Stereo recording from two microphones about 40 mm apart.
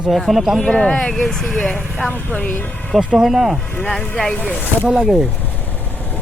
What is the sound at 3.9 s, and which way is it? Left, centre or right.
Speech, centre.